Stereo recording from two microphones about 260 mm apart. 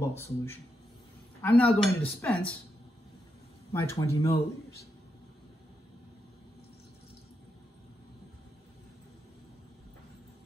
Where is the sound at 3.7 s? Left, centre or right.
Centre.